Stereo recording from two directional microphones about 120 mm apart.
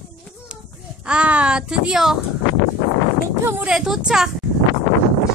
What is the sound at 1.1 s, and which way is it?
Speech, 10° right (ahead or behind).